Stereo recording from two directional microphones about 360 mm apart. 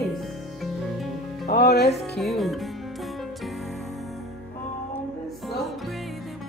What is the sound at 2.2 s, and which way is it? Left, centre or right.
Speech, centre.